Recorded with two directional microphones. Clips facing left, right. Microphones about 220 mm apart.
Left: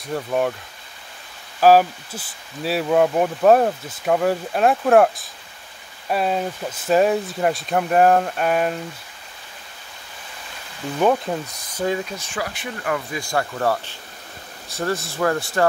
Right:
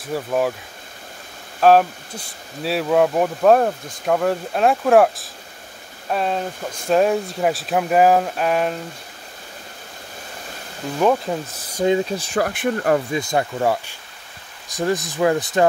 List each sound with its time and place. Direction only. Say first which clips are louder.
0.0 s speech: right 1 dB; centre (ahead or behind)
1.6 s speech: even; 5° left (ahead or behind)
11.0 s speech: right 1 dB; centre (ahead or behind)
11.7 s speech: right 5 dB; 20° right (ahead or behind)
12.4 s speech: right 9 dB; 55° right (ahead or behind)
13.1 s speech: right 3 dB; 20° right (ahead or behind)